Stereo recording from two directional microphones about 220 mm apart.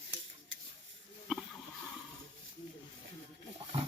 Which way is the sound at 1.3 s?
Centre (ahead or behind).